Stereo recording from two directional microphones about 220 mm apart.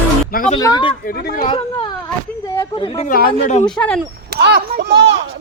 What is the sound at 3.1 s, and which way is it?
Speech, 40° left (ahead or behind).